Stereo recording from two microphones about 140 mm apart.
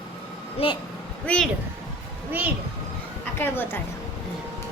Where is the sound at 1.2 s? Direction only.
10° left (ahead or behind).